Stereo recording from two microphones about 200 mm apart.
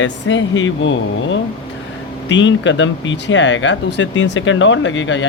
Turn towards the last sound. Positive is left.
turn(degrees=70)  # may be behind; listen again after turning